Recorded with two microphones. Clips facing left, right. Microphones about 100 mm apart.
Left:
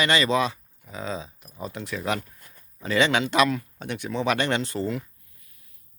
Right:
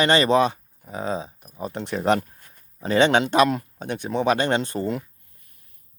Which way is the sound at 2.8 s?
30° right (ahead or behind).